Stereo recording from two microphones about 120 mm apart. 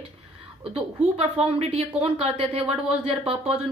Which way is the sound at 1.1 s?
55° right (ahead or behind).